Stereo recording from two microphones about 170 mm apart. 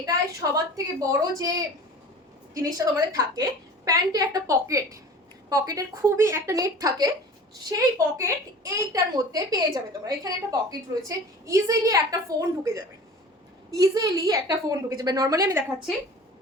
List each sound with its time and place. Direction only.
0.0 s a woman's voice: 20° right (ahead or behind)